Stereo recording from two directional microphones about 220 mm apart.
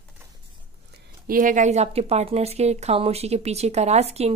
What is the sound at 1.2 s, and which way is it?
Speech, 40° right (ahead or behind).